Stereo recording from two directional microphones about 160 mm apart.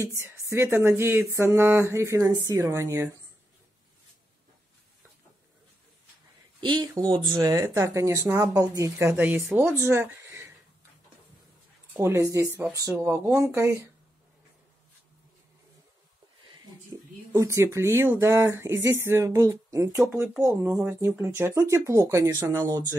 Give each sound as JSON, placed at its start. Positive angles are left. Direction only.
{"t": 0.0, "sound": "speech", "side_deg": -20}
{"t": 6.6, "sound": "speech", "side_deg": -25}
{"t": 11.9, "sound": "speech", "side_deg": -15}
{"t": 16.9, "sound": "speech", "side_deg": -20}